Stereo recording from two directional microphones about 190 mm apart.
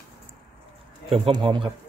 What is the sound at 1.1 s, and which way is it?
Speech, 25° right (ahead or behind).